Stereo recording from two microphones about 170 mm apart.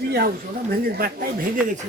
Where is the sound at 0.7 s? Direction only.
60° right (ahead or behind).